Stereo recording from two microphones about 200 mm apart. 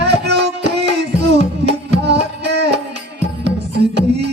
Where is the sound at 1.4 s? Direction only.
40° left (ahead or behind).